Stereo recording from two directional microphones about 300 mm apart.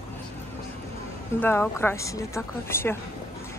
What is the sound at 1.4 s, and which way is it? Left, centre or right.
Speech, centre.